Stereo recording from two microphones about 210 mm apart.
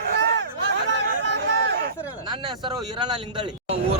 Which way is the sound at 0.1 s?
55° right (ahead or behind).